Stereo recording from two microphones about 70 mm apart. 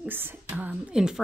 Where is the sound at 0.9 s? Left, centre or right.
Centre.